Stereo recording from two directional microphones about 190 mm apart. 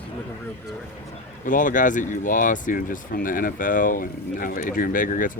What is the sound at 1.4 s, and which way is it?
Speech, 45° left (ahead or behind).